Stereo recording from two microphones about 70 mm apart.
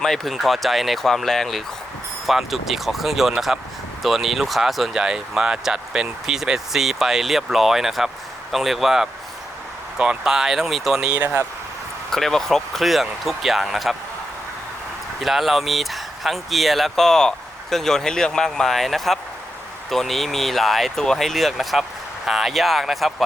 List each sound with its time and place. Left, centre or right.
0.0 s speech: centre
11.1 s speech: right
12.1 s speech: centre
15.2 s speech: centre